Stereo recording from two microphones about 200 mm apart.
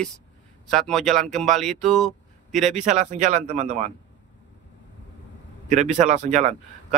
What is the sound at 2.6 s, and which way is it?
A man's voice, 35° right (ahead or behind).